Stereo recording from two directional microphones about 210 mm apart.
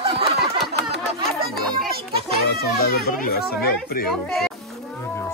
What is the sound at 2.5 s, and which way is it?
Speech, 50° left (ahead or behind).